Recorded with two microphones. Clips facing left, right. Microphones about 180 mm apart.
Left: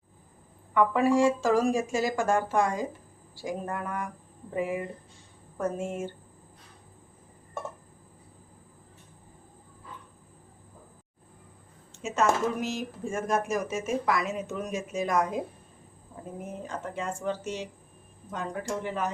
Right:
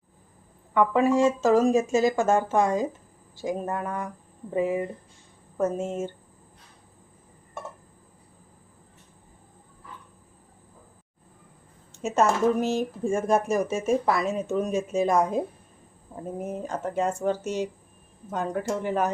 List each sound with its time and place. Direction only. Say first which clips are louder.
0.7 s speech: right 2 dB; 20° right (ahead or behind)
11.9 s a sound: right 7 dB; 40° right (ahead or behind)
12.5 s speech: right 7 dB; 30° right (ahead or behind)
16.4 s speech: right 6 dB; 45° right (ahead or behind)